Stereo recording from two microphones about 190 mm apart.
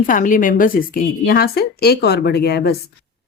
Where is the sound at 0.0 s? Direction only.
45° left (ahead or behind).